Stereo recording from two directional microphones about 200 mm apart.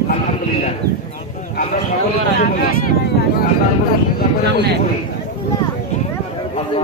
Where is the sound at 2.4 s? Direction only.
45° left (ahead or behind).